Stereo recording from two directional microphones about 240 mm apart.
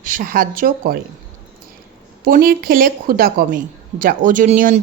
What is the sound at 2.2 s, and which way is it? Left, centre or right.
Speech, right.